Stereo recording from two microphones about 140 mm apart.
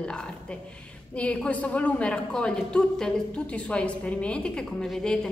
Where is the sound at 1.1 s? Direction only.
10° left (ahead or behind).